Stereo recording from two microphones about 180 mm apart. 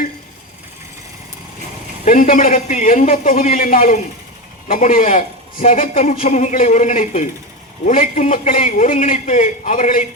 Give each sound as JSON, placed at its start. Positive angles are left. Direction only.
{"t": 2.0, "sound": "a man's voice", "side_deg": 45}